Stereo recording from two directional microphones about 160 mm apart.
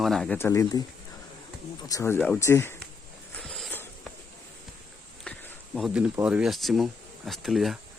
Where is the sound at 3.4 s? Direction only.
5° left (ahead or behind).